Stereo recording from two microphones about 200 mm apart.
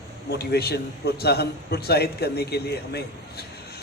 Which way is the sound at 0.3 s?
55° left (ahead or behind).